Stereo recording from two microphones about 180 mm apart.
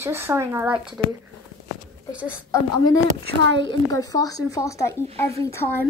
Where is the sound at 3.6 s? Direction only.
20° left (ahead or behind).